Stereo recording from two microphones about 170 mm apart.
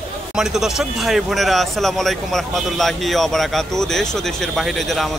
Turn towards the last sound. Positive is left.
turn(degrees=0)  # may be behind; listen again after turning